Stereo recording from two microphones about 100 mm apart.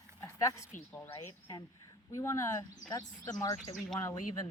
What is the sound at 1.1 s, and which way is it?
Speech, 50° left (ahead or behind).